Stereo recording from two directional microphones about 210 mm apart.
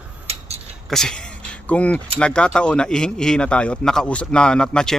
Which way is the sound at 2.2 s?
5° left (ahead or behind).